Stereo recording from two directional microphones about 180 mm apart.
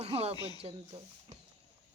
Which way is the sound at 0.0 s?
35° right (ahead or behind).